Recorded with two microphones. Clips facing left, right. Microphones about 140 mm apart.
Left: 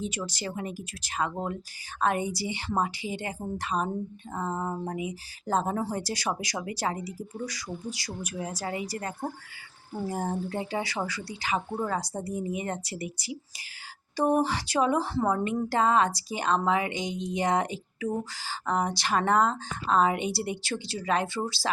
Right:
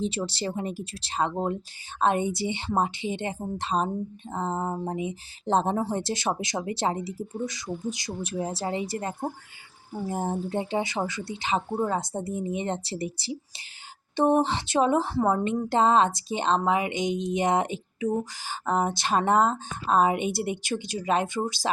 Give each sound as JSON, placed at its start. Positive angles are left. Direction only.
{"t": 0.0, "sound": "speech", "side_deg": -30}